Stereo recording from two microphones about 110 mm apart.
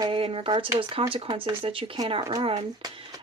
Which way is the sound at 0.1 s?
55° right (ahead or behind).